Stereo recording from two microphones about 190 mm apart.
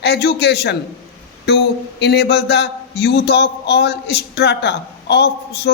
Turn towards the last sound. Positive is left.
turn(degrees=60)  # may be behind; listen again after turning